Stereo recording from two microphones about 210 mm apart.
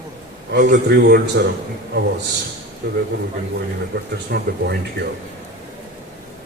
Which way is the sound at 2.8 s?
50° right (ahead or behind).